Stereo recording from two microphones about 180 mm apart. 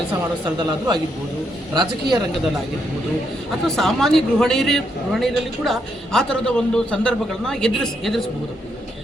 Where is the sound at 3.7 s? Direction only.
Centre (ahead or behind).